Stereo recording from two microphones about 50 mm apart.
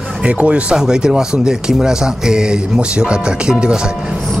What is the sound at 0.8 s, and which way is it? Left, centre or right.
Speech, centre.